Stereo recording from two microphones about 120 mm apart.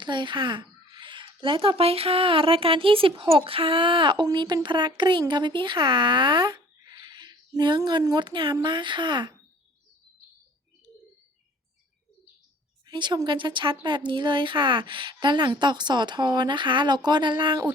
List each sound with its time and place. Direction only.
0.0 s speech: 40° right (ahead or behind)
12.9 s speech: 40° right (ahead or behind)